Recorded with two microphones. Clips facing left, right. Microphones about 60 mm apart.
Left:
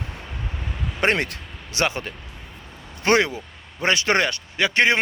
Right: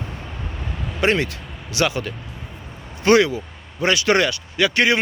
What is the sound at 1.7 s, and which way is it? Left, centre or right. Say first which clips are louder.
Speech: right 3 dB; left.